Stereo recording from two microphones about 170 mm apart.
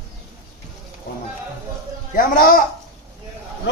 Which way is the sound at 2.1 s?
60° left (ahead or behind).